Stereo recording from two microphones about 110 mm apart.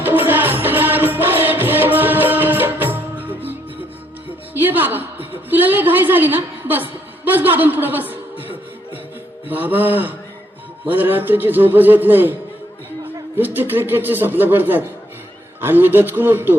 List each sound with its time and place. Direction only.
0.0 s music: 20° right (ahead or behind)
4.5 s a sound: 15° right (ahead or behind)
9.5 s a man's voice: 15° right (ahead or behind)